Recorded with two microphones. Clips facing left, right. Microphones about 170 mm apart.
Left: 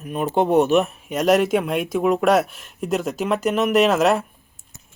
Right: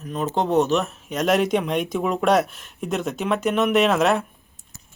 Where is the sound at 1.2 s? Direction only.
5° left (ahead or behind).